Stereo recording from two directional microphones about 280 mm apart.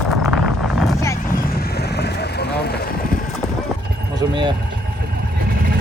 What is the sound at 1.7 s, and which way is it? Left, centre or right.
Vehicle, left.